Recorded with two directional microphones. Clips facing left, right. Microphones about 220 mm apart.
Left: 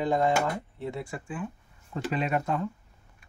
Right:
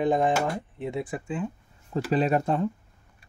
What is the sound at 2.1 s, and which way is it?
Speech, 35° right (ahead or behind).